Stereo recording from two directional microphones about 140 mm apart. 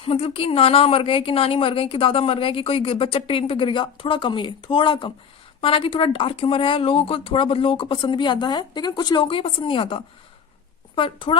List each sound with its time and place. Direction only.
0.0 s a woman's voice: 45° left (ahead or behind)